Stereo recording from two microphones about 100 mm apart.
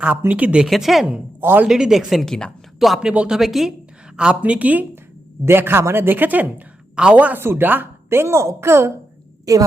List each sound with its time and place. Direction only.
0.3 s a woman's voice: 15° right (ahead or behind)
0.7 s speech: centre (ahead or behind)
1.4 s a man's voice: 20° right (ahead or behind)
1.6 s a woman's voice: 5° right (ahead or behind); by 8.9 s 25° right (ahead or behind)
9.5 s a woman's voice: 35° right (ahead or behind)